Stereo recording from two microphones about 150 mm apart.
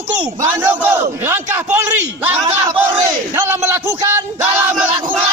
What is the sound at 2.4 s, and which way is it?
Battle cry, 30° right (ahead or behind).